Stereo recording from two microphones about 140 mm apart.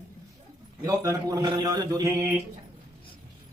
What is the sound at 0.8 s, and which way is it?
Speech, 25° right (ahead or behind).